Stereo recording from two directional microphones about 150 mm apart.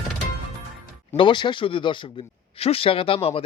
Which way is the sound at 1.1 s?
30° left (ahead or behind).